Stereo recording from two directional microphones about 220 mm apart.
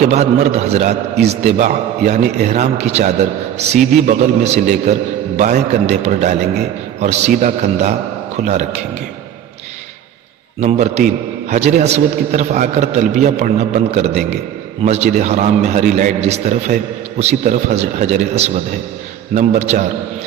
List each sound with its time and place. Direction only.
0.0 s a man's voice: 30° right (ahead or behind)
10.6 s a man's voice: 30° right (ahead or behind)